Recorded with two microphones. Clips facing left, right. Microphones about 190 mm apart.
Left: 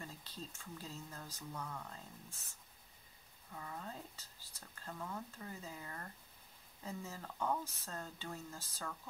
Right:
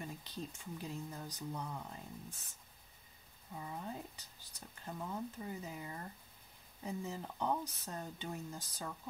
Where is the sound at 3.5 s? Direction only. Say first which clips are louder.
Right 3 dB; 15° right (ahead or behind).